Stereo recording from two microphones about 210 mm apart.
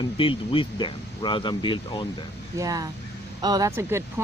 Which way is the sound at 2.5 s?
15° right (ahead or behind).